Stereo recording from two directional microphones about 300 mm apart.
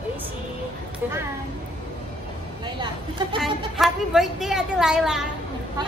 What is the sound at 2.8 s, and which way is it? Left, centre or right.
Speech, centre.